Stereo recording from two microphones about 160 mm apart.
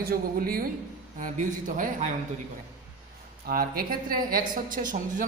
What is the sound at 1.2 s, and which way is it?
Speech, 55° right (ahead or behind).